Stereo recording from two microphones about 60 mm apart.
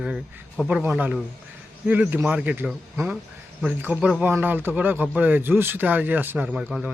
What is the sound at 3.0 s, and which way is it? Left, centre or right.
Speech, right.